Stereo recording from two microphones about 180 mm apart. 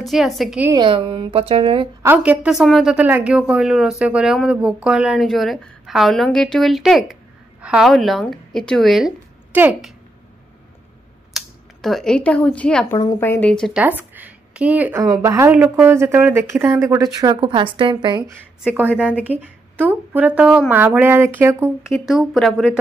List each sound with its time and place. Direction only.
0.0 s a woman's voice: centre (ahead or behind)
0.7 s a woman's voice: 25° right (ahead or behind)
2.0 s a woman's voice: 5° right (ahead or behind)
11.3 s speech: centre (ahead or behind)
12.9 s speech: 20° left (ahead or behind); by 13.8 s 5° left (ahead or behind)
13.8 s a woman's voice: 10° right (ahead or behind)
18.6 s a woman's voice: 5° right (ahead or behind)
22.0 s a woman's voice: centre (ahead or behind)